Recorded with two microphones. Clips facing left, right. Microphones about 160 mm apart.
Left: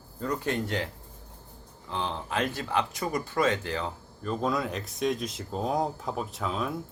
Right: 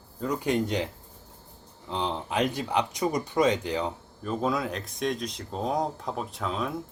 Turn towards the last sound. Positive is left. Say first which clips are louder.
# even
turn(degrees=0)  # may be behind; listen again after turning